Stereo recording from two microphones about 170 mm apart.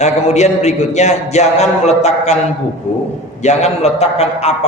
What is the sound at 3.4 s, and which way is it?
A man's voice, 40° left (ahead or behind).